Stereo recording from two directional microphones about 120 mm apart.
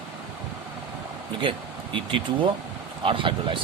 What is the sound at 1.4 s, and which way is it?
Speech, 45° right (ahead or behind).